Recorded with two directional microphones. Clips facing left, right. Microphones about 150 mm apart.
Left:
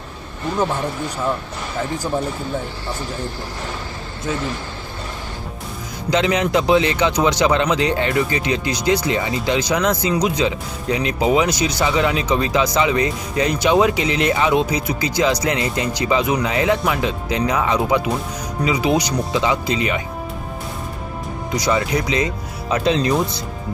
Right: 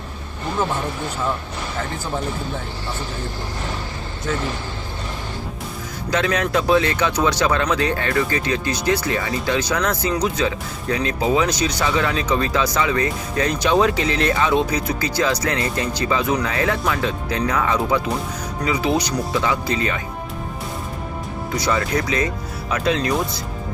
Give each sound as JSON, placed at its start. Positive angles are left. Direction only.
{"t": 4.3, "sound": "a man's voice", "side_deg": 15}
{"t": 6.1, "sound": "a man's voice", "side_deg": 15}
{"t": 21.5, "sound": "a man's voice", "side_deg": 15}